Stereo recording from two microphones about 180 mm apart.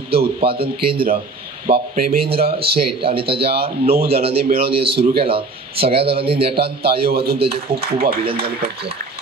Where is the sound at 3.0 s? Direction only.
30° right (ahead or behind).